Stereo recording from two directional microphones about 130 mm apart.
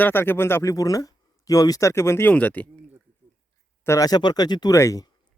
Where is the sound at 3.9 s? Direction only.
25° left (ahead or behind).